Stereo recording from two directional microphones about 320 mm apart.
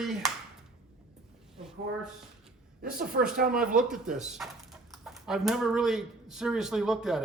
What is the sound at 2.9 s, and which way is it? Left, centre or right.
Speech, right.